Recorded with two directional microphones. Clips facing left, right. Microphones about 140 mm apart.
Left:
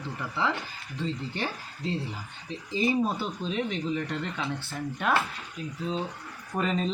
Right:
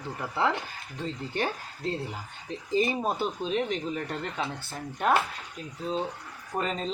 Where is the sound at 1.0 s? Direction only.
50° right (ahead or behind).